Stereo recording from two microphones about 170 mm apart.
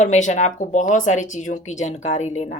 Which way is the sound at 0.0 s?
45° left (ahead or behind).